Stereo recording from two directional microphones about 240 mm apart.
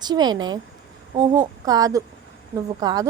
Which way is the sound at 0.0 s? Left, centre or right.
Centre.